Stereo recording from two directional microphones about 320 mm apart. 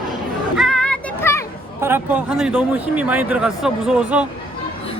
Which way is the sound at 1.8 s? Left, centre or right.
Centre.